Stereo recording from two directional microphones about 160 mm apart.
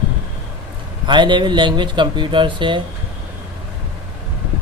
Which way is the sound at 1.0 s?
30° right (ahead or behind).